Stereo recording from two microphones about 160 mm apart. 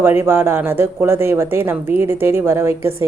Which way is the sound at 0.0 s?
15° right (ahead or behind).